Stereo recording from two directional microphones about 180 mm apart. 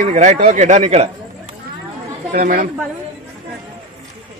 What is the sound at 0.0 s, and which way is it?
Speech, 40° right (ahead or behind).